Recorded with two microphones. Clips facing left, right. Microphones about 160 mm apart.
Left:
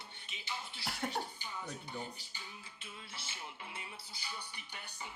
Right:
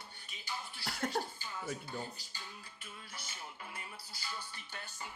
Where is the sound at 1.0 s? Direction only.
20° left (ahead or behind).